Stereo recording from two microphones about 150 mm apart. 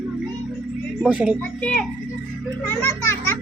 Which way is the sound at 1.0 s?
10° right (ahead or behind).